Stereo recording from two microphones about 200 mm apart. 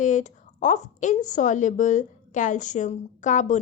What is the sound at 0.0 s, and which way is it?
A woman's voice, 35° left (ahead or behind).